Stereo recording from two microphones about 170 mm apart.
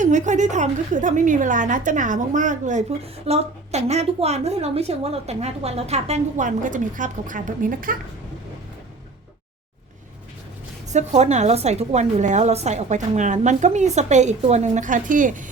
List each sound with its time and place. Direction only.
0.0 s a woman's voice: 45° right (ahead or behind)
10.9 s a woman's voice: 40° right (ahead or behind)